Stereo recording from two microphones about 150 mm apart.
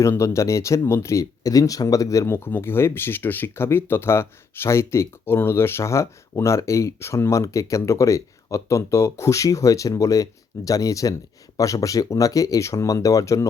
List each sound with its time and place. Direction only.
0.0 s speech: 20° left (ahead or behind)